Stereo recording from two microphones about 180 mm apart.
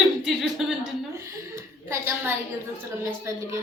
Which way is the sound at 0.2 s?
Centre (ahead or behind).